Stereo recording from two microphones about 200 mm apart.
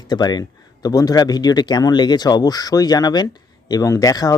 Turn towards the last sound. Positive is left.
turn(degrees=20)  # may be behind; listen again after turning